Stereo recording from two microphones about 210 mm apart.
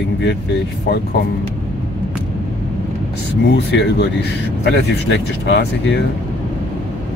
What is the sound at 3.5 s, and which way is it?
Speech, 55° left (ahead or behind).